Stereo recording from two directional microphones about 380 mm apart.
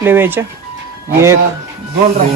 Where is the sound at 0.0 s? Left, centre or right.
Centre.